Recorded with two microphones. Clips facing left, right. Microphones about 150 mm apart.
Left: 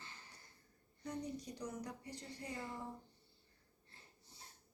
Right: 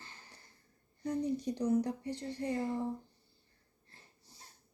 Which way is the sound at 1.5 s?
30° right (ahead or behind).